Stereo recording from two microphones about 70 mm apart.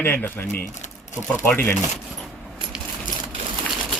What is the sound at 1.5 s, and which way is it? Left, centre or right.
Speech, left.